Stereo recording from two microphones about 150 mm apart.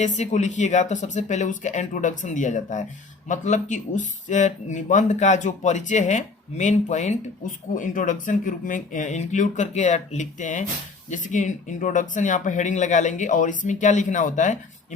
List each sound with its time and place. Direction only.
0.0 s speech: 50° left (ahead or behind)